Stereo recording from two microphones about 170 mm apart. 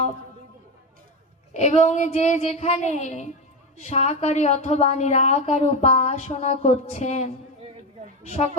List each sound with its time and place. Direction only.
1.5 s a woman's voice: 40° left (ahead or behind)